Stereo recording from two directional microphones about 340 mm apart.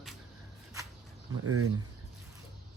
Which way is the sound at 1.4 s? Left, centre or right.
Right.